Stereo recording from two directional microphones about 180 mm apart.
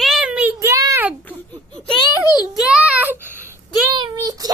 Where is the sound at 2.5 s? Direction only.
5° right (ahead or behind).